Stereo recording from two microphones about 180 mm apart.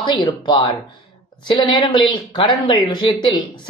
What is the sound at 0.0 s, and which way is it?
Speech, 25° left (ahead or behind).